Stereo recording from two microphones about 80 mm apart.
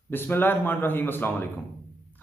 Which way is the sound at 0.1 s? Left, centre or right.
Left.